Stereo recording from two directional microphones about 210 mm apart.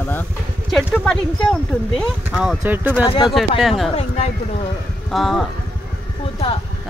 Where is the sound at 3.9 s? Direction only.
30° left (ahead or behind).